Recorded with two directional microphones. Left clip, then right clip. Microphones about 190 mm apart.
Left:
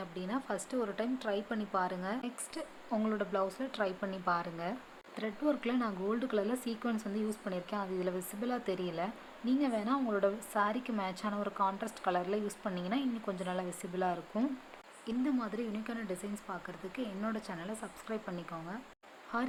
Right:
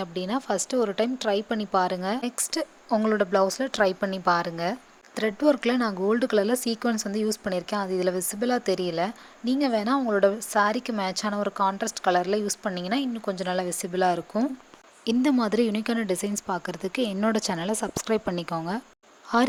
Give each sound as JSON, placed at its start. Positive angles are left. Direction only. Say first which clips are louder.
{"t": 0.0, "sound": "a woman's voice", "louder": "right 10 dB", "side_deg": -45}
{"t": 15.0, "sound": "a woman's voice", "louder": "right 12 dB", "side_deg": -55}